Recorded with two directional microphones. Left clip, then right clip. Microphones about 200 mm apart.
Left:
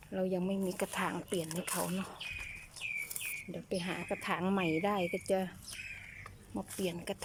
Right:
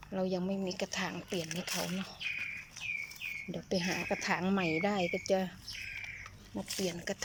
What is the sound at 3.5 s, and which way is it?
Speech, 5° right (ahead or behind).